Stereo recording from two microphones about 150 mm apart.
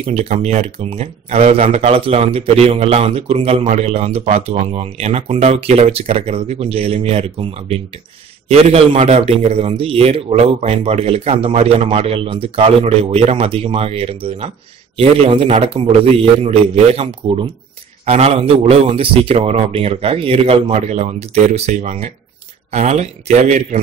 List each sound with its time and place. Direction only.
0.0 s speech: 45° right (ahead or behind)